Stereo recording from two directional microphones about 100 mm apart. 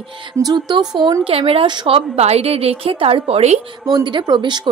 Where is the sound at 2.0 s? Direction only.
90° right.